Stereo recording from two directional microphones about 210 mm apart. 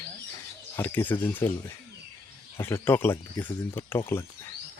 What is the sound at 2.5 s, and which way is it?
Speech, 10° left (ahead or behind).